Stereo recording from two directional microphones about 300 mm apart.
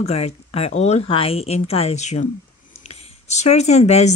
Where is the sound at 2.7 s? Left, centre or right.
Left.